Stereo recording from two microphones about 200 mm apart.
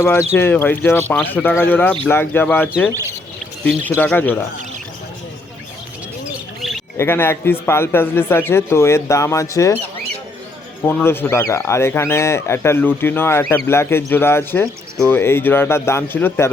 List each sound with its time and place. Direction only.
0.0 s speech: 10° left (ahead or behind)
6.6 s a sound: centre (ahead or behind)
6.9 s speech: 10° left (ahead or behind)
10.8 s speech: 10° left (ahead or behind)